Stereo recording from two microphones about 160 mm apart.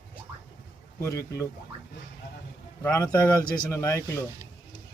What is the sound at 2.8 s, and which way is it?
A man's voice, 15° left (ahead or behind).